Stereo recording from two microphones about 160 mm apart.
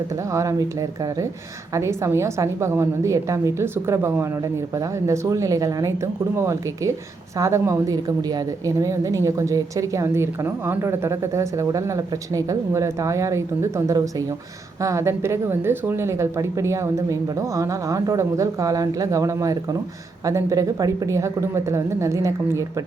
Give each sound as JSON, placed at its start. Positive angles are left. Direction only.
{"t": 0.3, "sound": "a woman's voice", "side_deg": -20}